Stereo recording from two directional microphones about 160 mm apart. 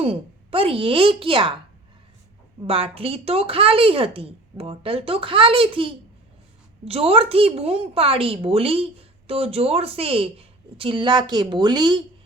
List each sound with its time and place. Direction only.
0.0 s a woman's voice: 35° right (ahead or behind)
2.6 s a woman's voice: 35° right (ahead or behind)